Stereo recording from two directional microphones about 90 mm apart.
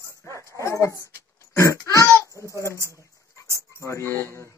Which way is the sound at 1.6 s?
35° left (ahead or behind).